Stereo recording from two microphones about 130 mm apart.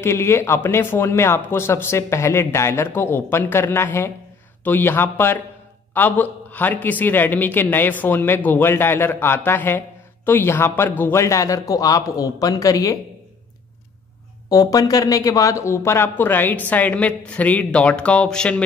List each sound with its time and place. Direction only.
0.0 s a man's voice: 20° left (ahead or behind)
14.5 s a man's voice: 30° left (ahead or behind); by 18.6 s 10° left (ahead or behind)